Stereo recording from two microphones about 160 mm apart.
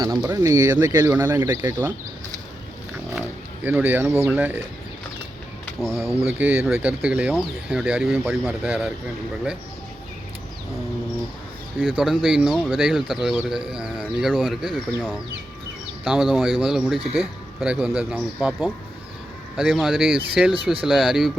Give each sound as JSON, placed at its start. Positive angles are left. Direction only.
{"t": 0.0, "sound": "speech", "side_deg": -25}
{"t": 1.4, "sound": "speech", "side_deg": -25}
{"t": 3.2, "sound": "a sound", "side_deg": -10}
{"t": 4.3, "sound": "speech", "side_deg": -10}
{"t": 5.8, "sound": "speech", "side_deg": 0}
{"t": 6.4, "sound": "speech", "side_deg": -15}
{"t": 11.8, "sound": "speech", "side_deg": 0}